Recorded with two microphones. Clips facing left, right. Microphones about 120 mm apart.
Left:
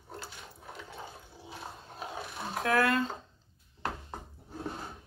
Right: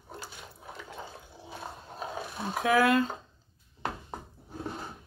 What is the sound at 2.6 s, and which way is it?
Speech, 5° right (ahead or behind).